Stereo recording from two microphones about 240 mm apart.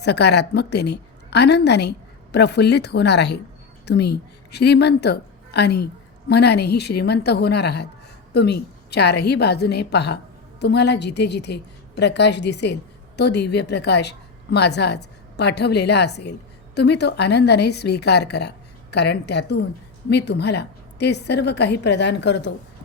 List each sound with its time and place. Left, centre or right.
0.0 s a woman's voice: left